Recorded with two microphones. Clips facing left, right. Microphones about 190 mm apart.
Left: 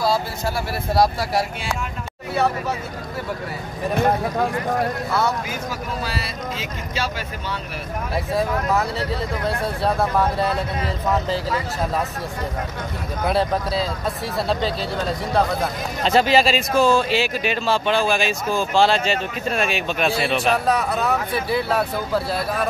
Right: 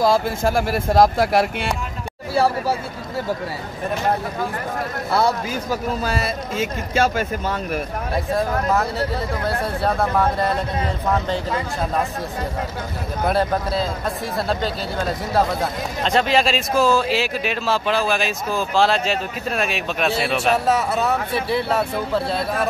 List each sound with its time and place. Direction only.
0.0 s speech: 50° right (ahead or behind)
5.1 s speech: 40° right (ahead or behind)
8.3 s speech: centre (ahead or behind)
13.3 s speech: centre (ahead or behind)